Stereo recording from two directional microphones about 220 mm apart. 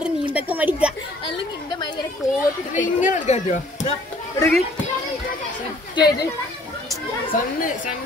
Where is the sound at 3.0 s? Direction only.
35° left (ahead or behind).